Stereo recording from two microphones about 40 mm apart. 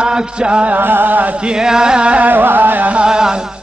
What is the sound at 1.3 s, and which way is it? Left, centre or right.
Chant, right.